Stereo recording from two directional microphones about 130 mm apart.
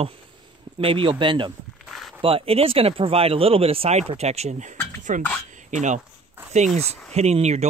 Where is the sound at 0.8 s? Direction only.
40° right (ahead or behind).